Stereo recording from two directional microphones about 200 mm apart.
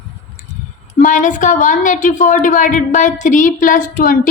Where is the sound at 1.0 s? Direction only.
40° left (ahead or behind).